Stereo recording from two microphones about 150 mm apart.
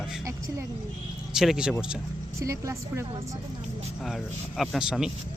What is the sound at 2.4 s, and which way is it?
Speech, 20° right (ahead or behind).